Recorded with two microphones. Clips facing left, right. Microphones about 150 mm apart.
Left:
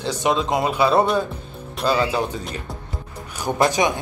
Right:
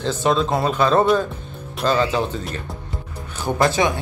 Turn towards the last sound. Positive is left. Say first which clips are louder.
# even
turn(degrees=15)  # may be behind; listen again after turning